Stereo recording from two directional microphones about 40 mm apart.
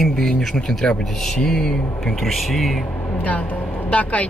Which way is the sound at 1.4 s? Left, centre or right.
Centre.